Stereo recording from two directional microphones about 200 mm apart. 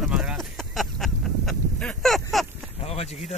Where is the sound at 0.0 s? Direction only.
5° right (ahead or behind).